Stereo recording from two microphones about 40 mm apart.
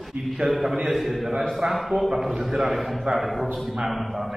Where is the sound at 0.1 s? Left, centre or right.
Right.